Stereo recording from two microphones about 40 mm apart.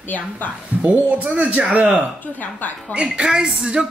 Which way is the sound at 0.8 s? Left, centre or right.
Right.